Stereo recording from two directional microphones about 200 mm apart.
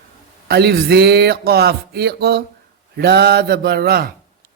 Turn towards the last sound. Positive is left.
turn(degrees=-50)  # may be behind; listen again after turning